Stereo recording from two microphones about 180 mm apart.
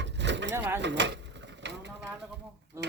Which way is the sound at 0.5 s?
15° right (ahead or behind).